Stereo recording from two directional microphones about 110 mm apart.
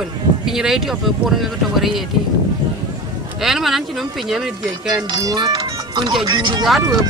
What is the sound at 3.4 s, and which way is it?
Speech, centre (ahead or behind).